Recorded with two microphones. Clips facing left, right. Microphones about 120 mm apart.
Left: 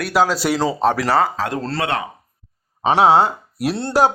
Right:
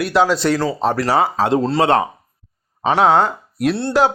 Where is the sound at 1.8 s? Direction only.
35° right (ahead or behind).